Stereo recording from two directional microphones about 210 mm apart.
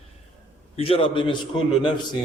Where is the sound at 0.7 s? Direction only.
25° left (ahead or behind).